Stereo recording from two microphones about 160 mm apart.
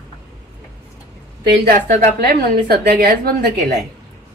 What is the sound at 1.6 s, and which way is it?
A woman's voice, 75° right (ahead or behind).